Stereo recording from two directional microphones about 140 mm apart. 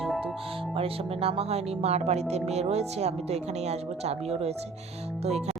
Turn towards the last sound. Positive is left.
turn(degrees=-50)  # may be behind; listen again after turning